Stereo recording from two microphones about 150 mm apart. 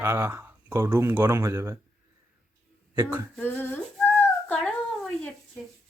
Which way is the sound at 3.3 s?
10° left (ahead or behind).